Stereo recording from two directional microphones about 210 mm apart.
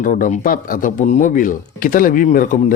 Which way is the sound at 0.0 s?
40° left (ahead or behind).